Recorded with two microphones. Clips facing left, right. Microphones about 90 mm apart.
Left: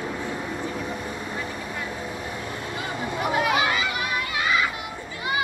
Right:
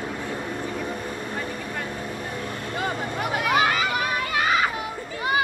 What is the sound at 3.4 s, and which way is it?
Children playing, 45° right (ahead or behind).